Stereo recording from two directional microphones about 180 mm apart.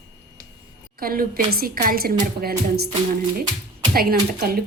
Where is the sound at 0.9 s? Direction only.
55° right (ahead or behind).